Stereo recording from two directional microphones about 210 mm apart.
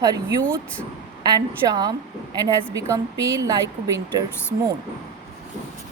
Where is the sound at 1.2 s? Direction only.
20° right (ahead or behind).